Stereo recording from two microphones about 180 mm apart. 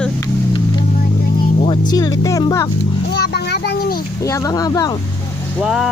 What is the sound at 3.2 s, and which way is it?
Music, 65° left (ahead or behind).